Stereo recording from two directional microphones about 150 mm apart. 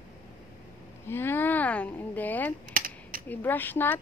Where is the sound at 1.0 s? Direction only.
15° left (ahead or behind).